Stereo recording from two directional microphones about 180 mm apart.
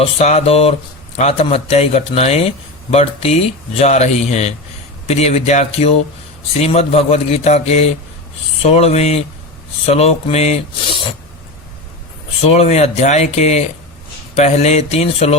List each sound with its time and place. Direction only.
0.0 s speech: 35° left (ahead or behind)
12.4 s speech: 35° left (ahead or behind)